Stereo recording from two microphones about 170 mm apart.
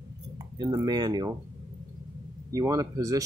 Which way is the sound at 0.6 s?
25° right (ahead or behind).